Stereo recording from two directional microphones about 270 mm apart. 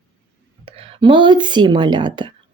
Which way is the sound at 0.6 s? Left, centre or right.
Centre.